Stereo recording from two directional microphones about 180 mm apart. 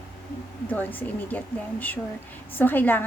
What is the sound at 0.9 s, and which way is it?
A woman's voice, 10° left (ahead or behind).